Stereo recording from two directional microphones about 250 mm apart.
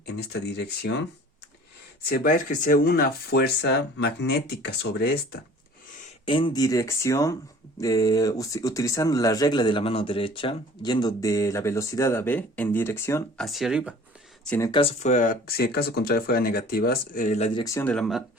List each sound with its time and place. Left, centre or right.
0.0 s speech: left
6.0 s speech: left; by 13.9 s centre
14.4 s speech: centre